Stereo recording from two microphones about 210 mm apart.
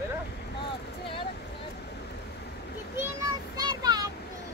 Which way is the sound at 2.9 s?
15° right (ahead or behind).